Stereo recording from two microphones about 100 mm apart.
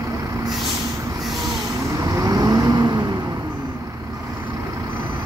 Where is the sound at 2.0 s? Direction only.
35° right (ahead or behind).